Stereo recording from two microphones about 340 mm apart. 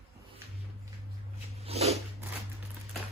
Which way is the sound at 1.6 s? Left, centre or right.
Centre.